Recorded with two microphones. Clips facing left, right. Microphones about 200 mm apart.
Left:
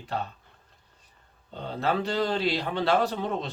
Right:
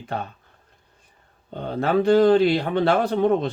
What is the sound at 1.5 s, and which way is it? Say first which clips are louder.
Speech: right 7 dB; 50° right (ahead or behind).